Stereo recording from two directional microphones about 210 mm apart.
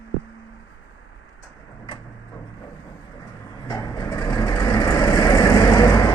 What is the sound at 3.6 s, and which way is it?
Vehicle, 20° left (ahead or behind).